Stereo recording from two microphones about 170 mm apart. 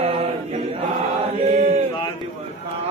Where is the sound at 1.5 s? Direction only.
45° right (ahead or behind).